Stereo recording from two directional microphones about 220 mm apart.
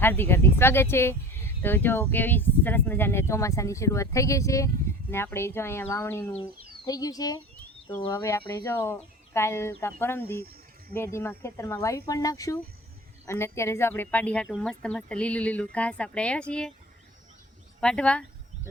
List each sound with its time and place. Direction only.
0.0 s speech: 10° left (ahead or behind)
6.3 s speech: 20° left (ahead or behind); by 16.7 s 5° left (ahead or behind)
17.7 s speech: 5° left (ahead or behind)